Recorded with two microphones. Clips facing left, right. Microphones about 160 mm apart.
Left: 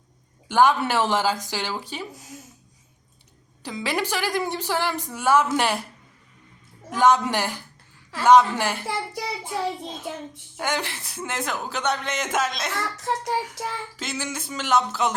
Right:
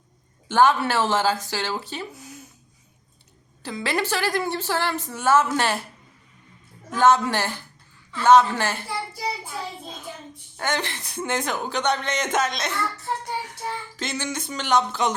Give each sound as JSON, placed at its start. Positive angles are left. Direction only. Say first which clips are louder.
{"t": 0.4, "sound": "a woman's voice", "louder": "even", "side_deg": 15}
{"t": 3.6, "sound": "a woman's voice", "louder": "right 1 dB", "side_deg": 15}
{"t": 6.9, "sound": "a woman's voice", "louder": "right 1 dB", "side_deg": 15}
{"t": 8.9, "sound": "child singing", "louder": "left 1 dB", "side_deg": 90}
{"t": 10.6, "sound": "speech", "louder": "even", "side_deg": 10}
{"t": 13.0, "sound": "child singing", "louder": "left 3 dB", "side_deg": 90}
{"t": 14.0, "sound": "speech", "louder": "right 3 dB", "side_deg": 5}